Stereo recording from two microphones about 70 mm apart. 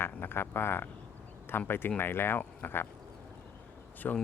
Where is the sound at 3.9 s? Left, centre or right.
Left.